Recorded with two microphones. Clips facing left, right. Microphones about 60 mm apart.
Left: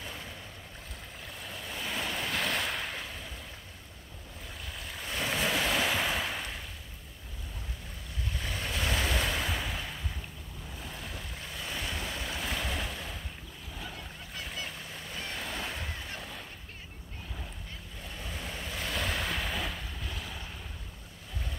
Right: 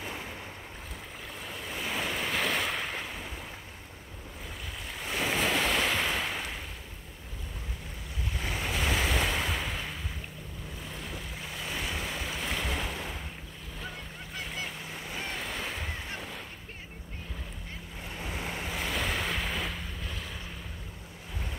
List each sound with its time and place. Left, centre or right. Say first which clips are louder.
0.0 s waves: right 4 dB; right
1.4 s waves: right 2 dB; centre
3.0 s ocean: right 3 dB; centre
4.9 s waves: right 3 dB; centre
8.5 s waves: right 3 dB; centre
10.8 s vehicle: right 1 dB; centre
13.7 s boat: right 2 dB; centre
14.9 s vehicle: right 3 dB; centre
15.3 s waves: right 1 dB; centre
18.0 s vehicle: right 4 dB; right
18.8 s waves: right 1 dB; centre